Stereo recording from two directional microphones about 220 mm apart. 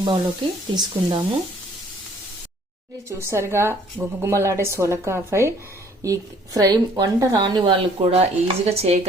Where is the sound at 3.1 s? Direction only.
10° right (ahead or behind).